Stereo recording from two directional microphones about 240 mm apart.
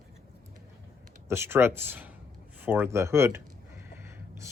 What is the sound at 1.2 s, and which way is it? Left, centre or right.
Speech, centre.